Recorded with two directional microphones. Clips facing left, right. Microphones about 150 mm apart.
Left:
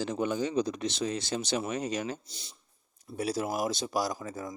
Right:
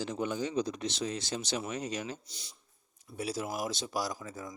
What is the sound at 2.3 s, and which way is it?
Speech, 30° left (ahead or behind).